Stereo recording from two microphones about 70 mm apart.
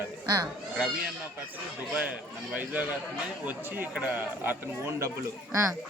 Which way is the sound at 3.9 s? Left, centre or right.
Right.